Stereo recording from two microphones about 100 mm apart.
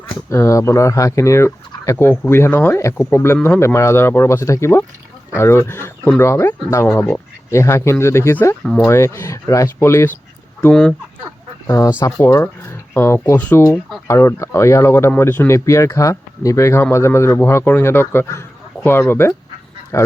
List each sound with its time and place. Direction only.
0.3 s speech: 30° left (ahead or behind)
8.6 s speech: 5° left (ahead or behind)
8.9 s speech: 25° left (ahead or behind)
10.6 s speech: 10° left (ahead or behind)
11.9 s speech: 30° left (ahead or behind)
14.1 s speech: 25° left (ahead or behind)